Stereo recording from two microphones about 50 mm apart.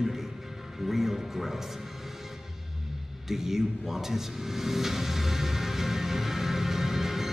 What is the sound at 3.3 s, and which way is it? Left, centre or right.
Vehicle, centre.